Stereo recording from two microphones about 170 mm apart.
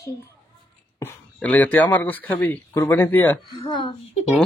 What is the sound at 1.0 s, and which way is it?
Speech, 10° left (ahead or behind).